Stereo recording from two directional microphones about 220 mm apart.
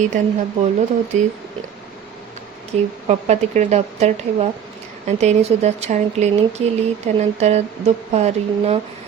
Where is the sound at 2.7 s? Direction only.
30° right (ahead or behind).